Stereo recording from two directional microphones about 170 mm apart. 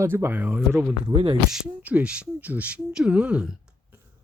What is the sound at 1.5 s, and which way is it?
Speech, 10° right (ahead or behind).